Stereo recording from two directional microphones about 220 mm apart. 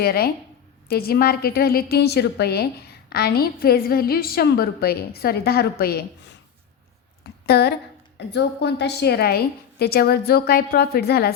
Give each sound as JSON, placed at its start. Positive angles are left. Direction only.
{"t": 0.0, "sound": "a woman's voice", "side_deg": 45}
{"t": 7.4, "sound": "a woman's voice", "side_deg": 45}